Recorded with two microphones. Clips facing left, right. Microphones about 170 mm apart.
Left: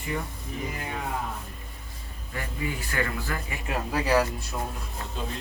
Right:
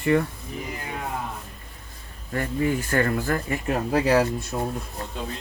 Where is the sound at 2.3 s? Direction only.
50° right (ahead or behind).